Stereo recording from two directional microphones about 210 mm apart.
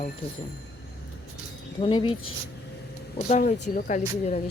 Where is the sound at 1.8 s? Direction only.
25° left (ahead or behind).